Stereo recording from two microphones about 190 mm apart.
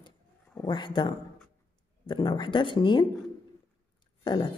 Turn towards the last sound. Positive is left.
turn(degrees=25)  # may be behind; listen again after turning